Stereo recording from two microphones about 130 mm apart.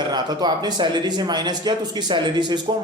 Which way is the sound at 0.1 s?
35° right (ahead or behind).